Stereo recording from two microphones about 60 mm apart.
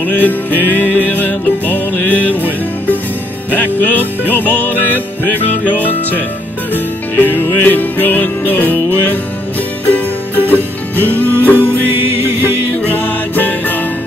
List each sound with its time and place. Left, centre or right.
0.0 s music: left
6.7 s music: left
13.0 s music: left